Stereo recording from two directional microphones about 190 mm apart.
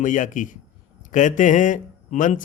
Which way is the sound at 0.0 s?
45° left (ahead or behind).